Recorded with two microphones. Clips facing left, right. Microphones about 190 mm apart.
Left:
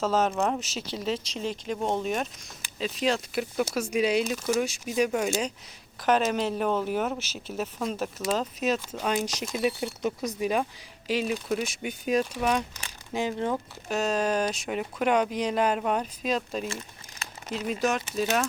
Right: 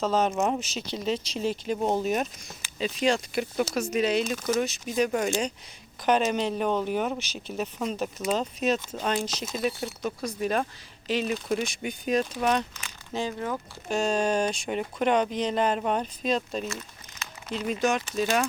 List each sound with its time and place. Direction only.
0.0 s speech: 5° left (ahead or behind)
13.1 s speech: 20° left (ahead or behind)
13.8 s speech: 5° left (ahead or behind)